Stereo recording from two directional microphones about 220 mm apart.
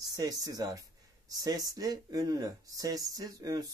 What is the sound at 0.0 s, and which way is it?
Speech, 15° right (ahead or behind).